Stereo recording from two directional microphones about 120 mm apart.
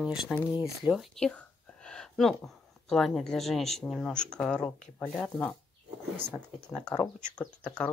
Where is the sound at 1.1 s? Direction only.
5° left (ahead or behind).